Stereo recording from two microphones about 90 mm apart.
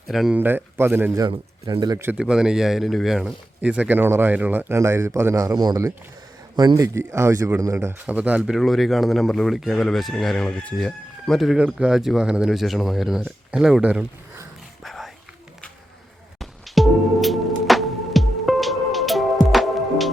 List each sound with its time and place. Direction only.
0.1 s speech: centre (ahead or behind)
0.3 s speech: 20° right (ahead or behind)
1.7 s a man's voice: 60° right (ahead or behind)
2.1 s speech: 10° right (ahead or behind)
3.6 s speech: 15° right (ahead or behind)
4.7 s speech: 30° right (ahead or behind)
5.5 s speech: 50° right (ahead or behind)
6.8 s speech: 30° right (ahead or behind)
8.0 s speech: 15° right (ahead or behind)
8.5 s speech: centre (ahead or behind)
14.8 s roaring cats: centre (ahead or behind)
16.4 s music: centre (ahead or behind)